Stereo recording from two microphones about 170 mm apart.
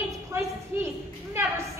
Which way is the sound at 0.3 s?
15° right (ahead or behind).